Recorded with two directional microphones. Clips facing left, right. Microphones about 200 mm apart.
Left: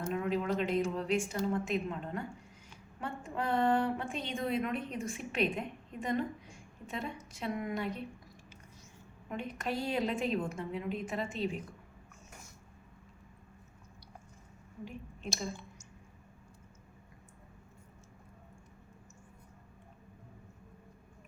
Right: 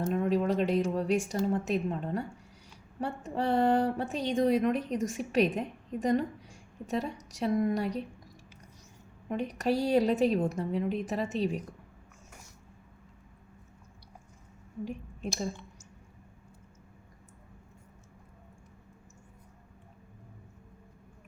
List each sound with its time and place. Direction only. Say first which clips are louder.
0.0 s speech: right 5 dB; 35° right (ahead or behind)
9.3 s speech: right 7 dB; 40° right (ahead or behind)
14.8 s a woman's voice: right 4 dB; 40° right (ahead or behind)